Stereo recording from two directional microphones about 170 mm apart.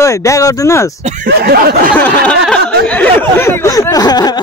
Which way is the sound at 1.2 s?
65° right (ahead or behind).